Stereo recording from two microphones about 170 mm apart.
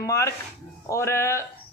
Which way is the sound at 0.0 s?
20° left (ahead or behind).